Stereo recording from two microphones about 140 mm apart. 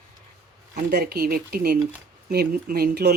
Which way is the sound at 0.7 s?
90° right.